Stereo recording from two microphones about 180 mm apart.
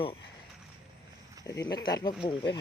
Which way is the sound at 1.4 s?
20° left (ahead or behind).